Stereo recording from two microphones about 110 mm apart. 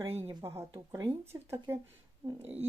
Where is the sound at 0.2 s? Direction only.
25° right (ahead or behind).